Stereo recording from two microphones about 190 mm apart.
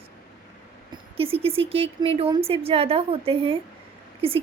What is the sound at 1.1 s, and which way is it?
A woman's voice, 30° right (ahead or behind).